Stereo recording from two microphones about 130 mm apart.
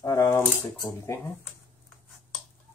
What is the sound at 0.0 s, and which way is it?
Cutlery, 30° left (ahead or behind).